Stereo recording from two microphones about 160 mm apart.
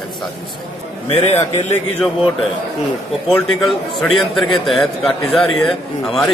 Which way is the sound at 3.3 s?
Centre (ahead or behind).